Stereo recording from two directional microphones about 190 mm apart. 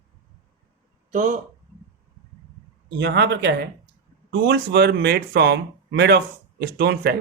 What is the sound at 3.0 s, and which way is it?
Speech, 60° right (ahead or behind).